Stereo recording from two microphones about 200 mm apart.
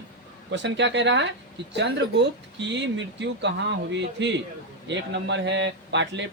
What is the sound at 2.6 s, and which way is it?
Speech, 60° right (ahead or behind).